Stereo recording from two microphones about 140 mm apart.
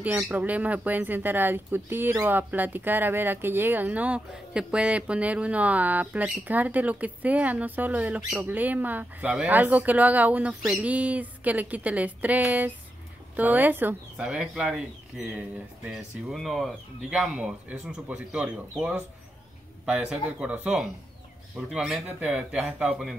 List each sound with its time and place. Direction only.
0.2 s speech: 10° right (ahead or behind)